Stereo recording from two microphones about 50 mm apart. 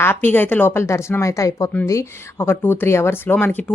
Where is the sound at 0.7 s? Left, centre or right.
Left.